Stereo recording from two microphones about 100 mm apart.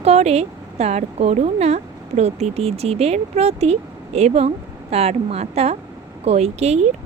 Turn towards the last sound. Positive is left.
turn(degrees=-90)